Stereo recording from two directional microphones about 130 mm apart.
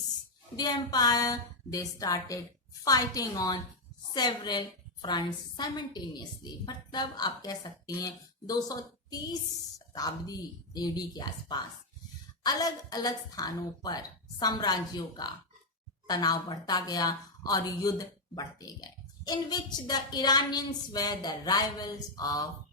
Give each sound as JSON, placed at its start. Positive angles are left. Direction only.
{"t": 0.5, "sound": "a woman's voice", "side_deg": 30}